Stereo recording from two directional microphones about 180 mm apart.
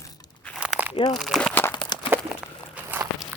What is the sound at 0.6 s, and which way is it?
Crunch, 10° right (ahead or behind).